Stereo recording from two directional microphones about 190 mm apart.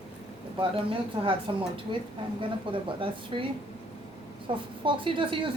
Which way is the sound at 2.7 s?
25° right (ahead or behind).